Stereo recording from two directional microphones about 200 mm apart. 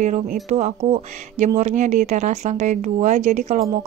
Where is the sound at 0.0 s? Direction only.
35° right (ahead or behind).